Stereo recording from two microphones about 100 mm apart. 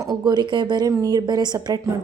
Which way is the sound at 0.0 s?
40° right (ahead or behind).